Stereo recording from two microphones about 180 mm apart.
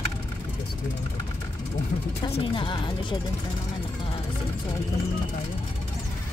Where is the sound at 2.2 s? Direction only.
30° left (ahead or behind).